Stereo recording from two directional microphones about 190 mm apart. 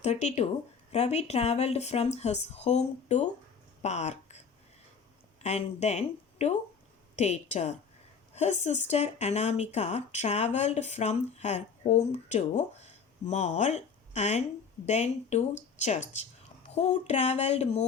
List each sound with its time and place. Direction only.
0.0 s speech: 35° left (ahead or behind)